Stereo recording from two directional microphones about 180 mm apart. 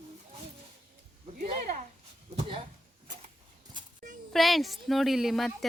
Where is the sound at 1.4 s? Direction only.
45° right (ahead or behind).